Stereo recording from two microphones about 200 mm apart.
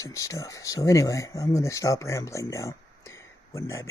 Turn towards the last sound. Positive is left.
turn(degrees=15)  # may be behind; listen again after turning